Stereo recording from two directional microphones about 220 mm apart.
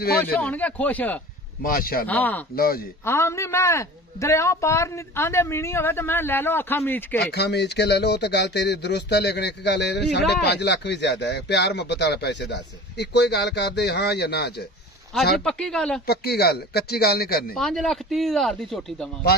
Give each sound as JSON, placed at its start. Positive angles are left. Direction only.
{"t": 0.2, "sound": "a man's voice", "side_deg": 10}
{"t": 1.6, "sound": "speech", "side_deg": 40}
{"t": 2.0, "sound": "a man's voice", "side_deg": 10}
{"t": 2.5, "sound": "speech", "side_deg": 45}
{"t": 3.1, "sound": "a man's voice", "side_deg": 10}
{"t": 7.2, "sound": "speech", "side_deg": 50}
{"t": 15.1, "sound": "speech", "side_deg": 0}
{"t": 16.1, "sound": "speech", "side_deg": 45}
{"t": 17.6, "sound": "speech", "side_deg": 0}